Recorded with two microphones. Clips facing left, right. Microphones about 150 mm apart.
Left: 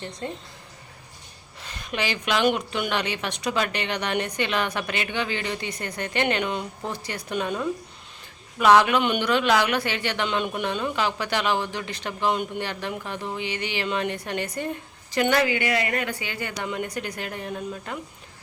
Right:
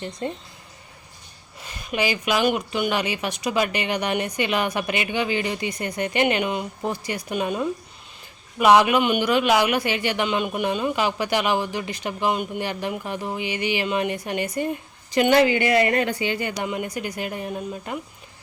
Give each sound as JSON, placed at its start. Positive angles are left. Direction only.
{"t": 0.2, "sound": "speech", "side_deg": -20}
{"t": 1.6, "sound": "speech", "side_deg": -5}
{"t": 16.0, "sound": "speech", "side_deg": -20}